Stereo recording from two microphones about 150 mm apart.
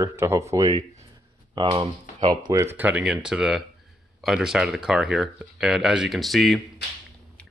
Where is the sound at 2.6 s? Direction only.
10° right (ahead or behind).